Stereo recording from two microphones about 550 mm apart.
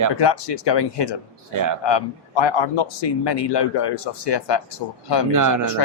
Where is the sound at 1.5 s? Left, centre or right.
Right.